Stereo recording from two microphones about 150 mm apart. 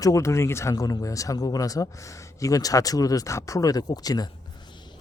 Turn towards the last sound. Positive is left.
turn(degrees=25)  # may be behind; listen again after turning